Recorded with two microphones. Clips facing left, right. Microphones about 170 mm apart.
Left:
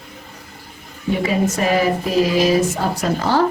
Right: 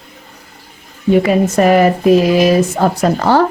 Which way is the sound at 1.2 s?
60° right (ahead or behind).